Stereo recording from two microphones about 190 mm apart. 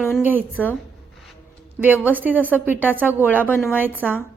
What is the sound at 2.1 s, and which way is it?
A woman's voice, 10° right (ahead or behind).